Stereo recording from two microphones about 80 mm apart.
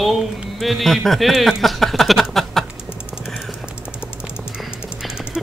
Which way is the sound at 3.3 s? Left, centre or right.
Centre.